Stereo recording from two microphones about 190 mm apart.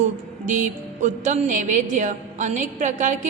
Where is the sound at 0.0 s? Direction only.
40° right (ahead or behind).